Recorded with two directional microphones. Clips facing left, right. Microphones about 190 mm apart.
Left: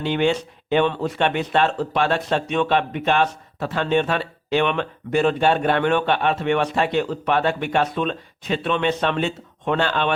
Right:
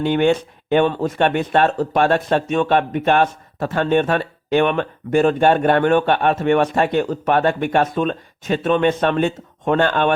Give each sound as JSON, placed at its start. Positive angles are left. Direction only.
{"t": 0.0, "sound": "speech", "side_deg": -50}